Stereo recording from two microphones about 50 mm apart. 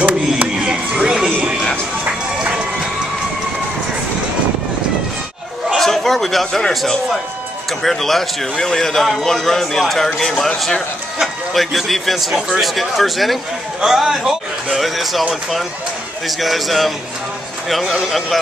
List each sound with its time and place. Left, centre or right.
0.0 s a sound: right
2.3 s run: centre
5.8 s a man's voice: centre
16.3 s speech: centre